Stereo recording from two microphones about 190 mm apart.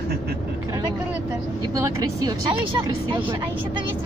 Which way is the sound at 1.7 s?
15° right (ahead or behind).